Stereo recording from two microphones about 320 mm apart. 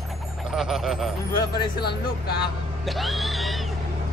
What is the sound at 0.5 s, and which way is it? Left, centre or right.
Speech, centre.